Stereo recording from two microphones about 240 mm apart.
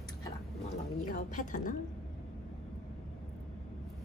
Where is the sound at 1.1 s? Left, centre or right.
Left.